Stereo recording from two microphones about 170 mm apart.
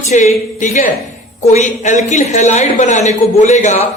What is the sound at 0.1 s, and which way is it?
Speech, 45° left (ahead or behind).